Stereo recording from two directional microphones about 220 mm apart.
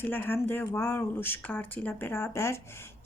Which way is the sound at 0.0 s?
10° left (ahead or behind).